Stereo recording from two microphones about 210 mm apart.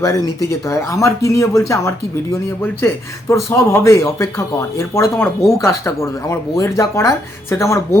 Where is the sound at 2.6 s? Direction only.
10° left (ahead or behind).